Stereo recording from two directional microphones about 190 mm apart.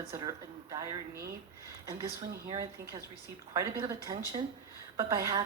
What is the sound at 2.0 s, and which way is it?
A man's voice, 20° right (ahead or behind).